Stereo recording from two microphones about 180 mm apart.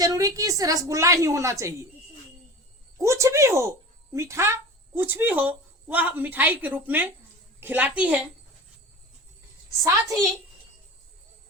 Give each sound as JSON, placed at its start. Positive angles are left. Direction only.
{"t": 0.0, "sound": "a woman's voice", "side_deg": -20}
{"t": 3.0, "sound": "a woman's voice", "side_deg": -15}
{"t": 9.8, "sound": "a woman's voice", "side_deg": -20}